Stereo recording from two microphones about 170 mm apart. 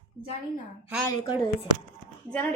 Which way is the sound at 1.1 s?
25° left (ahead or behind).